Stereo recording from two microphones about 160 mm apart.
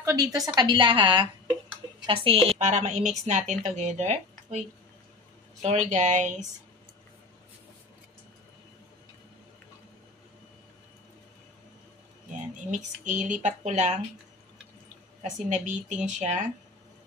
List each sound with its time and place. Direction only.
0.0 s a woman's voice: 20° right (ahead or behind); by 6.5 s 50° right (ahead or behind)
12.3 s speech: 50° right (ahead or behind)
15.3 s a woman's voice: 50° right (ahead or behind)